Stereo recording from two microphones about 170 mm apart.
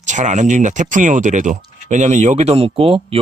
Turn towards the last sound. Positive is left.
turn(degrees=-35)  # may be behind; listen again after turning